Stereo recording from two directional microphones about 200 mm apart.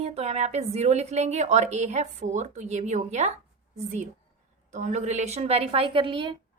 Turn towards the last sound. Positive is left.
turn(degrees=-25)  # may be behind; listen again after turning